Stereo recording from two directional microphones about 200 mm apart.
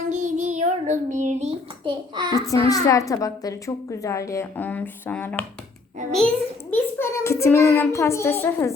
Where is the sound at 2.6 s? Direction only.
15° left (ahead or behind).